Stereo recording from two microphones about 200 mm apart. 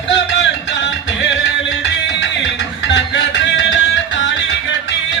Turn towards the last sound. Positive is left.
turn(degrees=65)  # may be behind; listen again after turning